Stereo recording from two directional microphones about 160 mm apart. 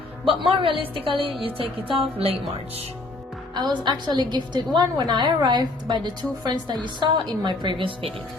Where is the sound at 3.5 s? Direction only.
25° right (ahead or behind).